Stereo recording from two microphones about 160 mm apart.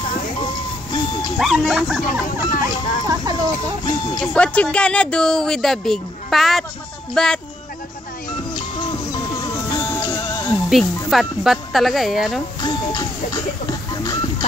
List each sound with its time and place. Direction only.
1.4 s speech: centre (ahead or behind)
2.0 s speech: 55° left (ahead or behind)
3.1 s speech: 25° right (ahead or behind)
3.8 s speech: 25° left (ahead or behind)
4.2 s speech: 5° left (ahead or behind)
8.5 s music: 30° left (ahead or behind)
11.1 s speech: centre (ahead or behind)
12.6 s music: 25° left (ahead or behind)